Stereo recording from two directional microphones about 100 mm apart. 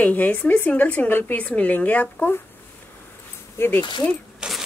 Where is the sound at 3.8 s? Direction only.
50° left (ahead or behind).